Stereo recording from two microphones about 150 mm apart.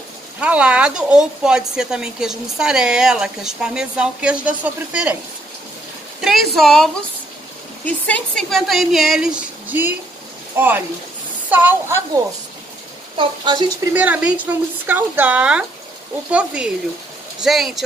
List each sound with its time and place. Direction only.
0.4 s speech: 10° right (ahead or behind)
6.2 s speech: centre (ahead or behind)
11.5 s speech: 10° right (ahead or behind)
13.2 s a woman's voice: 30° right (ahead or behind)
13.9 s speech: 10° right (ahead or behind)